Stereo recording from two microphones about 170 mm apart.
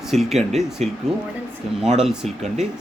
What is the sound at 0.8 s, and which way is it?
Speech, 40° right (ahead or behind).